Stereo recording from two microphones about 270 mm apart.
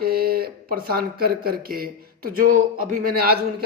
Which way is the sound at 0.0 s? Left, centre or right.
Right.